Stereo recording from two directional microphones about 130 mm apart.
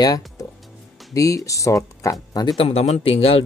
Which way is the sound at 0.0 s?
30° left (ahead or behind).